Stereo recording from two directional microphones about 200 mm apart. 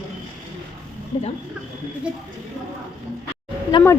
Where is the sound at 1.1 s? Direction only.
30° left (ahead or behind).